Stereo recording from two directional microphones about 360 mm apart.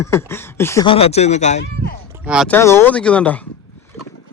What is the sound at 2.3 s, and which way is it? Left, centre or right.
Speech, centre.